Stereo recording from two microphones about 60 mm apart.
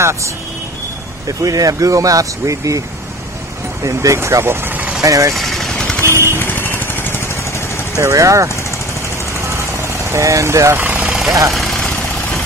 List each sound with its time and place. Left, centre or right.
0.0 s speech: right
1.2 s speech: right
3.8 s speech: right
5.0 s speech: right
5.3 s vehicle: centre
6.0 s vehicle: right
6.4 s vehicle: left
8.0 s speech: right
10.1 s speech: right
10.8 s vehicle: right
11.1 s vehicle: centre
11.5 s vehicle: centre